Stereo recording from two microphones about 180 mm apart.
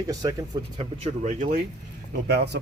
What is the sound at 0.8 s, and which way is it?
Speech, 40° right (ahead or behind).